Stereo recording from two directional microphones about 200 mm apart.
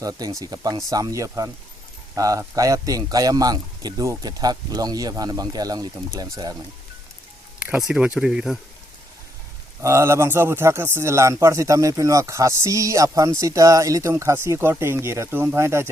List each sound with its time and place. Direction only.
0.0 s a man's voice: 20° right (ahead or behind)
7.6 s speech: 5° right (ahead or behind)
9.8 s speech: 15° right (ahead or behind)